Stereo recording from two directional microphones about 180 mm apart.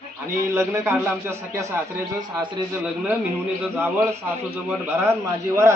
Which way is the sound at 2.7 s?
10° right (ahead or behind).